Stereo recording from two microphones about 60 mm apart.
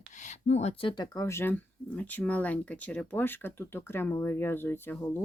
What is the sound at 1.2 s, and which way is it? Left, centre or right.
Speech, left.